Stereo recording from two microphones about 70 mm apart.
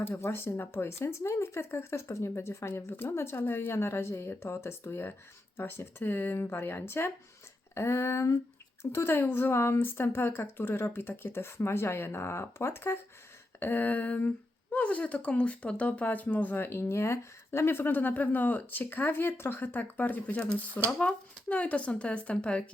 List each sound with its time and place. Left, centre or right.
0.0 s speech: left; by 22.7 s centre